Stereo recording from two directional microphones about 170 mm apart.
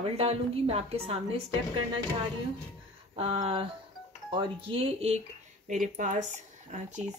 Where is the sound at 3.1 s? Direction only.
35° right (ahead or behind).